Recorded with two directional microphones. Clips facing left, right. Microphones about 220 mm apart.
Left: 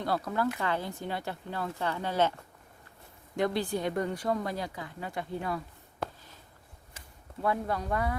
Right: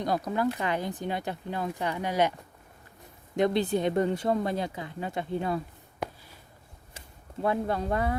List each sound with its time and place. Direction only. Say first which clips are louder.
0.0 s speech: right 3 dB; 15° right (ahead or behind)
3.3 s speech: right 4 dB; 20° right (ahead or behind)
6.0 s a sound: right 2 dB; 10° right (ahead or behind)
7.4 s speech: right 3 dB; 25° right (ahead or behind)